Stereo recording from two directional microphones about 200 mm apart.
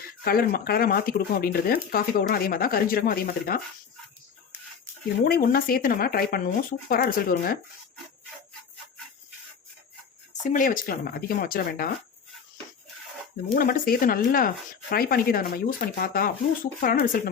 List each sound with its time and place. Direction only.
0.3 s speech: 50° left (ahead or behind)
5.2 s speech: 45° left (ahead or behind)
10.4 s speech: 40° left (ahead or behind)
13.5 s speech: 45° left (ahead or behind)